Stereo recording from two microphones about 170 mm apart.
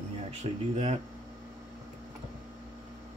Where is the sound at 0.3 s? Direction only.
40° right (ahead or behind).